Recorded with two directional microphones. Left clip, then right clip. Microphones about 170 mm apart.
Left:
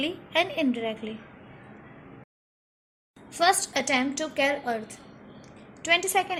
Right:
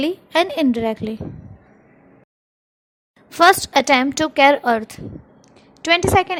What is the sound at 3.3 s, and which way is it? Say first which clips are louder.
A woman's voice: right 10 dB; 45° right (ahead or behind).